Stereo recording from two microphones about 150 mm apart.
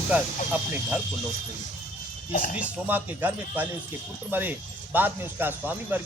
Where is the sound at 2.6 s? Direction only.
10° right (ahead or behind).